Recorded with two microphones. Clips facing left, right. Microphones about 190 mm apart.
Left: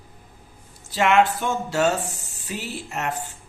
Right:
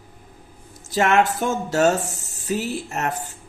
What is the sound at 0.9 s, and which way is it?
Speech, 45° right (ahead or behind).